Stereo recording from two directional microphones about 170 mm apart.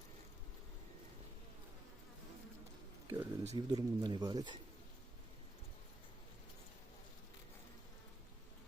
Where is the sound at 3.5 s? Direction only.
25° right (ahead or behind).